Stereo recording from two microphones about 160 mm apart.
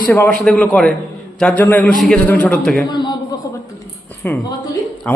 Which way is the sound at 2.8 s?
25° left (ahead or behind).